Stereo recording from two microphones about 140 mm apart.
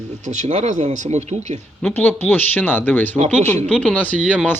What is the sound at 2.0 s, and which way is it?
Speech, 15° left (ahead or behind).